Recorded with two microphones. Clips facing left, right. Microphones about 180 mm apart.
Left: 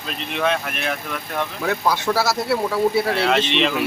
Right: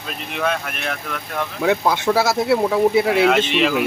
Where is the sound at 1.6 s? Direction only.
20° right (ahead or behind).